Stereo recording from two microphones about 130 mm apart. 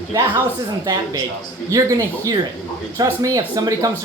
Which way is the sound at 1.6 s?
25° right (ahead or behind).